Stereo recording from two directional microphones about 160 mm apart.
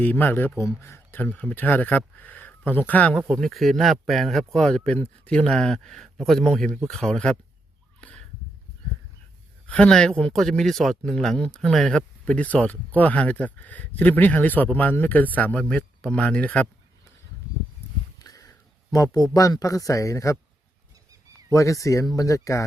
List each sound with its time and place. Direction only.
0.0 s speech: 10° left (ahead or behind)
9.6 s speech: 5° left (ahead or behind)
18.2 s speech: 20° left (ahead or behind)
21.5 s speech: 20° left (ahead or behind)